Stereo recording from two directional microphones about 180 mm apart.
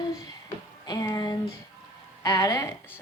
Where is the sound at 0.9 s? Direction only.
20° left (ahead or behind).